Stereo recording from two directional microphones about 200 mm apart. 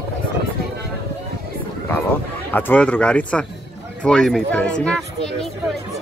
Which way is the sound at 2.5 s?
10° left (ahead or behind).